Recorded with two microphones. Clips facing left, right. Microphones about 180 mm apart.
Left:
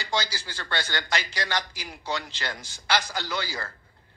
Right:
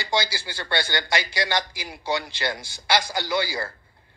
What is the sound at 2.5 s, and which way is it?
A man's voice, 10° right (ahead or behind).